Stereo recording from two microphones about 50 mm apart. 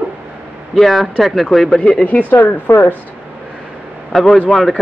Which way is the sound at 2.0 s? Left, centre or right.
Left.